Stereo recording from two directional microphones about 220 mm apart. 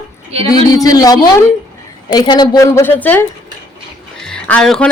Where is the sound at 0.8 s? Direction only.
15° left (ahead or behind).